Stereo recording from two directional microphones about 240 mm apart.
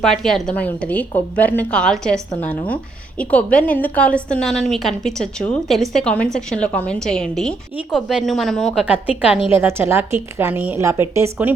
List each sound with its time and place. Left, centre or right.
0.0 s a woman's voice: centre